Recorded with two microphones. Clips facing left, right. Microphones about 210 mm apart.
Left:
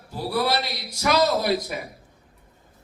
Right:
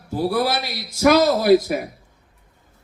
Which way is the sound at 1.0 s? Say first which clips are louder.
Right 6 dB; 55° right (ahead or behind).